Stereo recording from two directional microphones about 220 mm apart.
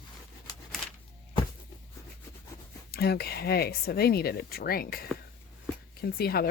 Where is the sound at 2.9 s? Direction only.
45° left (ahead or behind).